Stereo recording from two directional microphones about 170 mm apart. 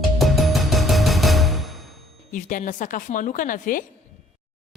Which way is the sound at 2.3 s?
50° left (ahead or behind).